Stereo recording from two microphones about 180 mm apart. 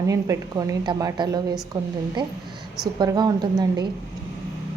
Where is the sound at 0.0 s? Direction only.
20° right (ahead or behind).